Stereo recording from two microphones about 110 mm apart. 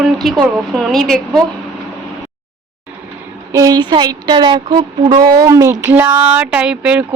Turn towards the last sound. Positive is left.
turn(degrees=-10)  # may be behind; listen again after turning